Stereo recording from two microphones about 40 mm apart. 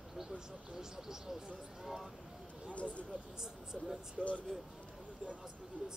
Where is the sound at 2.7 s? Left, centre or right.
Left.